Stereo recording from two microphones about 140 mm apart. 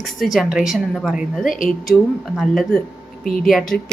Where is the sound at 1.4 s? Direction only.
75° left (ahead or behind).